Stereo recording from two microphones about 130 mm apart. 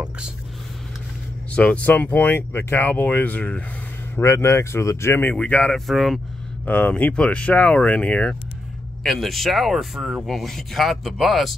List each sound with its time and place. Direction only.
1.5 s speech: 10° left (ahead or behind)
6.6 s speech: 10° left (ahead or behind)